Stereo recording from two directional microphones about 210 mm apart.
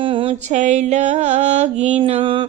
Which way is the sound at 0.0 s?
25° right (ahead or behind).